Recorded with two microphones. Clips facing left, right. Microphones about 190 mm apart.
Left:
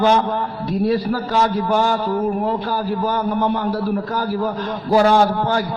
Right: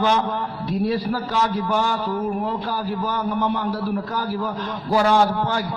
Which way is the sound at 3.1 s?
40° left (ahead or behind).